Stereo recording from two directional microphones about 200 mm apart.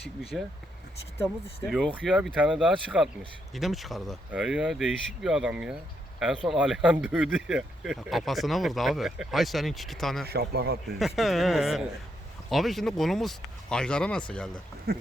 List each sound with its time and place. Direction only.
0.3 s speech: 5° right (ahead or behind)
1.6 s speech: centre (ahead or behind)
10.2 s a man's voice: 50° right (ahead or behind)
11.2 s speech: centre (ahead or behind)
14.9 s a man's voice: 50° right (ahead or behind)